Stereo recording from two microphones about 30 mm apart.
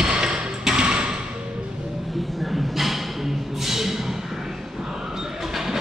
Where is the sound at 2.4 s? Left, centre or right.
Centre.